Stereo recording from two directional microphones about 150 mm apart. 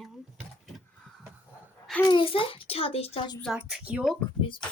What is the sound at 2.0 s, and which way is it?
A child's voice, 35° left (ahead or behind).